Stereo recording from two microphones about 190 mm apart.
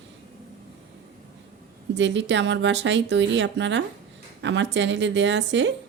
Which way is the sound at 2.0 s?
70° right (ahead or behind).